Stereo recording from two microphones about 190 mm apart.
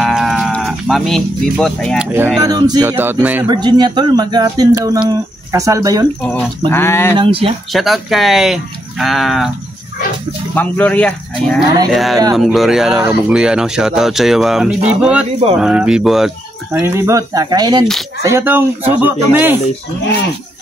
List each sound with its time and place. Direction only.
0.0 s livestock: centre (ahead or behind)
2.1 s speech: 10° right (ahead or behind)
3.4 s speech: 25° right (ahead or behind)
6.7 s cattle: 10° left (ahead or behind)
7.2 s speech: 30° right (ahead or behind)
7.7 s speech: centre (ahead or behind)
10.5 s cattle: 10° left (ahead or behind)
11.9 s speech: centre (ahead or behind)
16.7 s speech: 15° right (ahead or behind)